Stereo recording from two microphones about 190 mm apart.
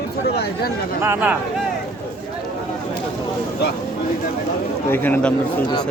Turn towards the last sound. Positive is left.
turn(degrees=10)  # may be behind; listen again after turning